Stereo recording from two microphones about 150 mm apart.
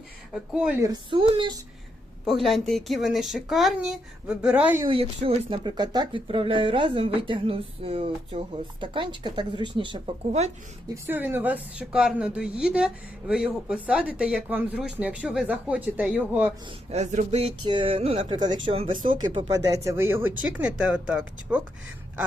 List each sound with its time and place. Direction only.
0.5 s a woman's voice: 5° right (ahead or behind)
0.8 s speech: 30° right (ahead or behind)
2.2 s speech: centre (ahead or behind)
4.9 s speech: 40° right (ahead or behind)
5.6 s speech: 30° right (ahead or behind)
10.8 s a woman's voice: 20° right (ahead or behind)
16.9 s a sound: 50° right (ahead or behind)
17.7 s a woman's voice: 35° right (ahead or behind); by 21.6 s 10° right (ahead or behind)